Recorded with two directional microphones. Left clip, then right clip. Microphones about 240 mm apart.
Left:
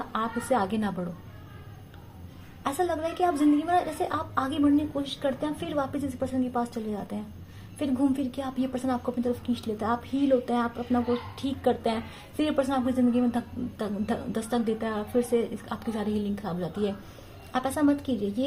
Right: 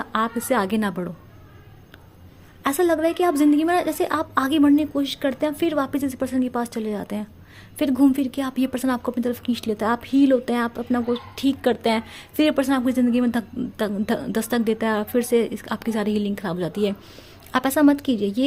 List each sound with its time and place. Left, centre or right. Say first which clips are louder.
0.0 s a woman's voice: right 6 dB; right
2.6 s a woman's voice: right 8 dB; right